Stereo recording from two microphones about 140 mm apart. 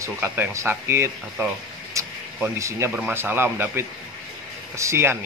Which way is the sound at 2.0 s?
20° right (ahead or behind).